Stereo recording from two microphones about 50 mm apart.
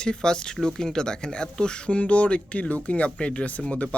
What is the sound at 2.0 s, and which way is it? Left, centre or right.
Speech, left.